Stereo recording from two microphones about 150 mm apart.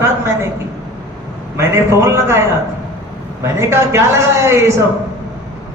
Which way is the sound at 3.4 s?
15° right (ahead or behind).